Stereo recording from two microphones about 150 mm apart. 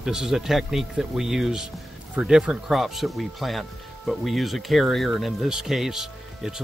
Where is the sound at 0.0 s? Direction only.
5° right (ahead or behind).